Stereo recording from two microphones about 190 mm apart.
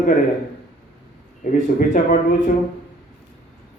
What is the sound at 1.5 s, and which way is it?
Speech, 40° left (ahead or behind).